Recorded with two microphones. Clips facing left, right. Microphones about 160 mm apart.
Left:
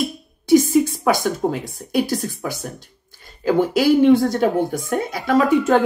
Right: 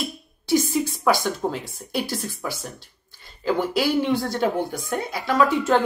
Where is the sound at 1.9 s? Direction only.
50° left (ahead or behind).